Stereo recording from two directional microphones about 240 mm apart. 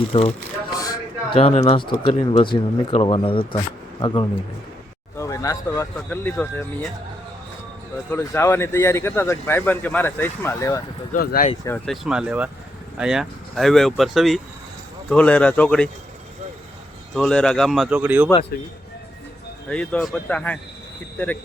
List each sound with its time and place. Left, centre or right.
0.1 s speech: left; by 6.9 s centre
8.1 s speech: centre
11.1 s speech: left
11.6 s speech: centre
12.0 s speech: centre
17.2 s speech: centre
19.6 s speech: centre